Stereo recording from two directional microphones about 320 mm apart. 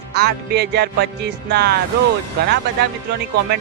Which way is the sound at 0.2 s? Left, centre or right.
Right.